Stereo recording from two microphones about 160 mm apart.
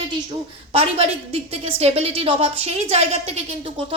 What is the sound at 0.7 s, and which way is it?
A woman's voice, 40° right (ahead or behind).